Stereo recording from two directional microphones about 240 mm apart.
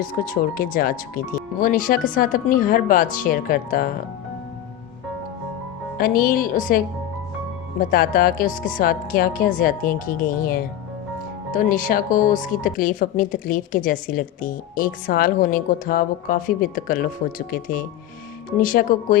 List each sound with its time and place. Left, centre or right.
0.0 s speech: left
6.0 s speech: left